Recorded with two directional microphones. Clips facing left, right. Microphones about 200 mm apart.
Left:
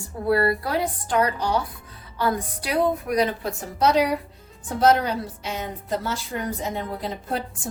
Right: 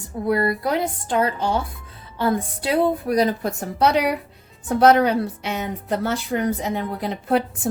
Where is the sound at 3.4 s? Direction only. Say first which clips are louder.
Right 3 dB; 55° right (ahead or behind).